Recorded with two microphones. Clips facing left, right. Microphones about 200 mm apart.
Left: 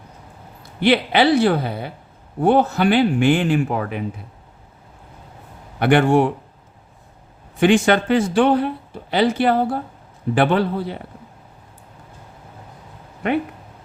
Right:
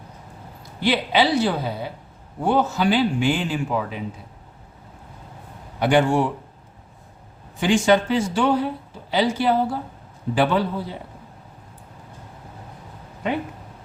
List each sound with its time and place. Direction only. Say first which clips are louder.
0.8 s speech: left 4 dB; 60° left (ahead or behind)
5.8 s speech: left 3 dB; 60° left (ahead or behind)
7.6 s speech: left 3 dB; 60° left (ahead or behind)